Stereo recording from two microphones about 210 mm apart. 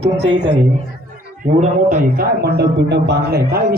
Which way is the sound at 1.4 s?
35° right (ahead or behind).